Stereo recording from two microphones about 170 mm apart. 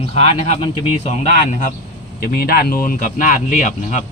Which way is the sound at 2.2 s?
60° left (ahead or behind).